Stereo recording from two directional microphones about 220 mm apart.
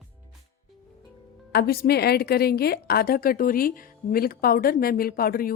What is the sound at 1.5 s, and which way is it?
A woman's voice, 45° left (ahead or behind).